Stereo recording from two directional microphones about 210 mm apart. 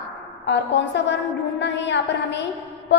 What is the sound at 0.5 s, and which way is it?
A woman's voice, 55° left (ahead or behind).